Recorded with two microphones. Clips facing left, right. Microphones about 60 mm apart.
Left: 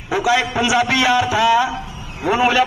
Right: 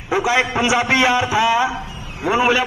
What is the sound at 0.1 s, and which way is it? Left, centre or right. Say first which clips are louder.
A man's voice: even; right.